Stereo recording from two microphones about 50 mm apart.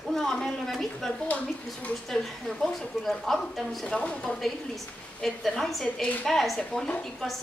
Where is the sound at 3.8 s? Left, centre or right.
Centre.